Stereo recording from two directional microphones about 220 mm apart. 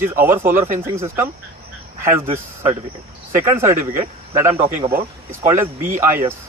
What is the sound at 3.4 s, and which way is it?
Speech, 10° right (ahead or behind).